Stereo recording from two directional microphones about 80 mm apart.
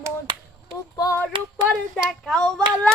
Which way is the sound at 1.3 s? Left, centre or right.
Right.